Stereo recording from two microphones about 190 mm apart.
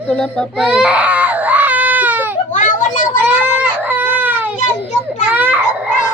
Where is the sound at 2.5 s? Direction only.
40° left (ahead or behind).